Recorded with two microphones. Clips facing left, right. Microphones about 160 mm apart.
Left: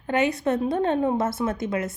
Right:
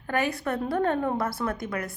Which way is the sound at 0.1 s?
20° left (ahead or behind).